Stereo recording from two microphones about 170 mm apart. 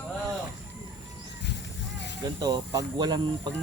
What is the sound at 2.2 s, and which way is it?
Speech, 25° right (ahead or behind).